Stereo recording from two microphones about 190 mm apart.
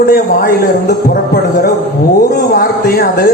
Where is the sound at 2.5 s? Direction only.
55° left (ahead or behind).